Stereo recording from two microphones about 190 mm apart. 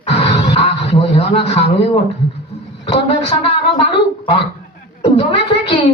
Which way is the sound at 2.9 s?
30° left (ahead or behind).